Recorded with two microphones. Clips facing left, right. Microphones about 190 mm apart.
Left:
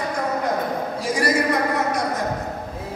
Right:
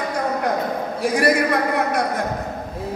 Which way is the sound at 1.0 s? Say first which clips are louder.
Right 5 dB; 60° right (ahead or behind).